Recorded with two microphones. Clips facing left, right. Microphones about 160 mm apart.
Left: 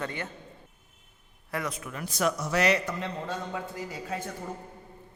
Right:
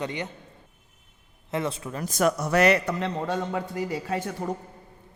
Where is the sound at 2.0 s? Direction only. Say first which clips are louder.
Right 5 dB; 45° right (ahead or behind); by 4.2 s 65° right (ahead or behind).